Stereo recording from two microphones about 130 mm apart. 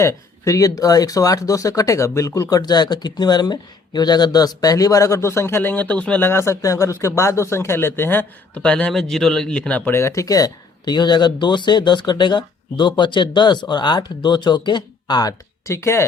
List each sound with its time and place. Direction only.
0.0 s speech: 25° left (ahead or behind)